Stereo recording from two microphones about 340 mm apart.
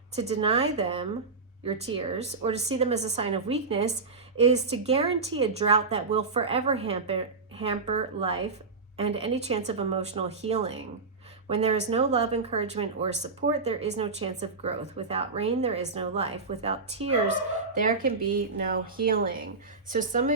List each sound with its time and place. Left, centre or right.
0.2 s speech: centre